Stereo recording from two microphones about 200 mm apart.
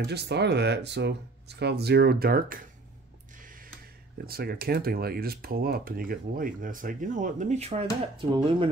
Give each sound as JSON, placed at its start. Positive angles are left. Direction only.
{"t": 0.0, "sound": "speech", "side_deg": -55}
{"t": 4.3, "sound": "speech", "side_deg": -50}